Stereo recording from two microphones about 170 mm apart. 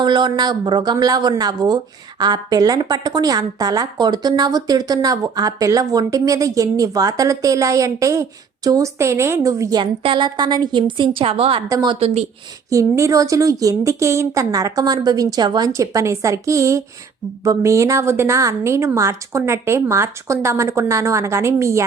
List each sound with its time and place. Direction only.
0.0 s speech: 25° right (ahead or behind)
11.7 s speech: 25° right (ahead or behind)
11.9 s speech: 35° right (ahead or behind)
12.7 s a woman's voice: 20° right (ahead or behind)